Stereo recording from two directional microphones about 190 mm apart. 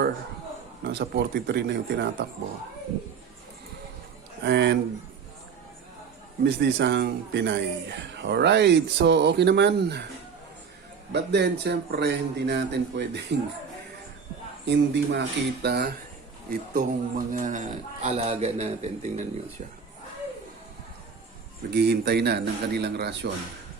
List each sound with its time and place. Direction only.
0.9 s a man's voice: 65° right (ahead or behind)
4.4 s a man's voice: 65° right (ahead or behind)
6.4 s a man's voice: 65° right (ahead or behind)
11.1 s a man's voice: 60° right (ahead or behind)
14.6 s a man's voice: 65° right (ahead or behind)
16.5 s a man's voice: 45° right (ahead or behind)
21.7 s a man's voice: 60° right (ahead or behind)